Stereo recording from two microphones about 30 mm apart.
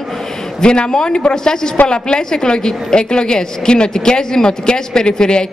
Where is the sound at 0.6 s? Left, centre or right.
Left.